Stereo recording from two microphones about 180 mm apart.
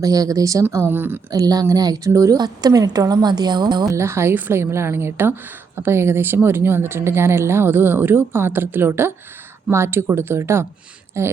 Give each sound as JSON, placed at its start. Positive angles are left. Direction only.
{"t": 0.0, "sound": "speech", "side_deg": -20}